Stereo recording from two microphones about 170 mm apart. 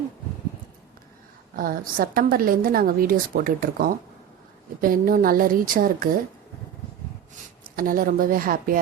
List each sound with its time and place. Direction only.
1.5 s a woman's voice: 55° right (ahead or behind)
7.8 s a woman's voice: 55° right (ahead or behind)